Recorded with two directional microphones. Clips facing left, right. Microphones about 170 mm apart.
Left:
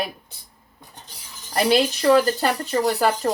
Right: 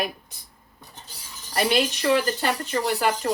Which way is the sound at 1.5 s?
35° left (ahead or behind).